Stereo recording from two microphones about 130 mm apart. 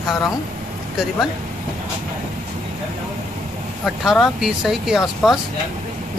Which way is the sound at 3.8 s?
Centre (ahead or behind).